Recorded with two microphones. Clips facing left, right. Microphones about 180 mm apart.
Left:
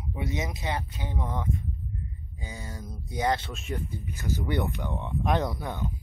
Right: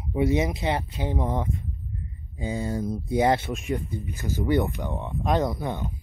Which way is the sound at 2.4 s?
25° right (ahead or behind).